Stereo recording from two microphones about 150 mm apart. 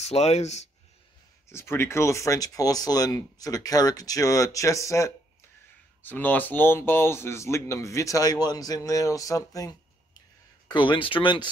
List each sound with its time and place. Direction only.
0.0 s speech: 45° left (ahead or behind)
1.5 s speech: 15° left (ahead or behind); by 11.4 s 35° left (ahead or behind)